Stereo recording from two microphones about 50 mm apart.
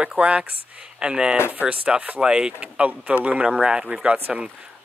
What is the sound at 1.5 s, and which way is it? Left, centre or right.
Speech, right.